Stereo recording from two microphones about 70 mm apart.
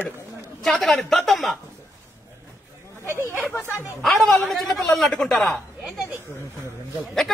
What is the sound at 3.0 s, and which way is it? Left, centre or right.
Speech, right.